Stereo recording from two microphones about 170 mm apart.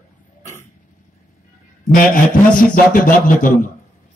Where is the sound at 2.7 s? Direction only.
55° left (ahead or behind).